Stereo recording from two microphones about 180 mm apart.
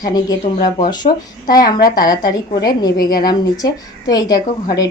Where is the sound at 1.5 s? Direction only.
20° left (ahead or behind).